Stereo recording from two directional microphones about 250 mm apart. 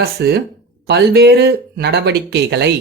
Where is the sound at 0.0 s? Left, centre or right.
Right.